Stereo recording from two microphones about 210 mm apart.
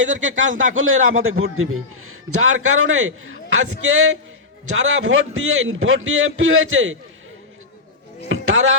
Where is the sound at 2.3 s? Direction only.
85° right.